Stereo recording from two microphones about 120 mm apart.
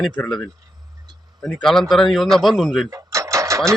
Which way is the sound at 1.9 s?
Centre (ahead or behind).